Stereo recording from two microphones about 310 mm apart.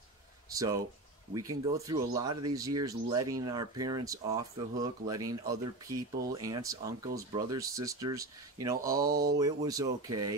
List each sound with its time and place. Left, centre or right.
0.5 s speech: centre
9.0 s speech: right
9.3 s speech: centre